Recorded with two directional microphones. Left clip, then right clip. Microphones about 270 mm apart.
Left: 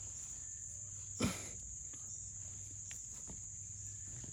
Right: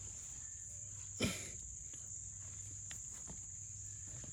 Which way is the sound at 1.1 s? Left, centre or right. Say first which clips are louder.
Even; left.